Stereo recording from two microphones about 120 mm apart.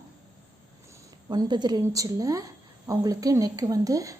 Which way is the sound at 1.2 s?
35° right (ahead or behind).